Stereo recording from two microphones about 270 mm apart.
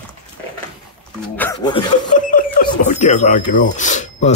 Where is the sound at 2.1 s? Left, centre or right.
Left.